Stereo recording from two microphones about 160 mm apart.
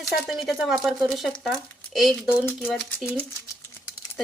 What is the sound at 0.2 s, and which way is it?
Speech, centre (ahead or behind).